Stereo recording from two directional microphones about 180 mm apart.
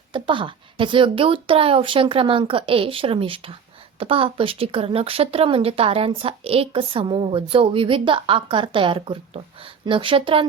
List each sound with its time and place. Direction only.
0.1 s a woman's voice: 30° right (ahead or behind)